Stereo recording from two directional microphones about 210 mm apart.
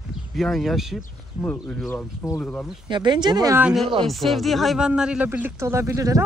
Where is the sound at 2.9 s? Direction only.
20° right (ahead or behind).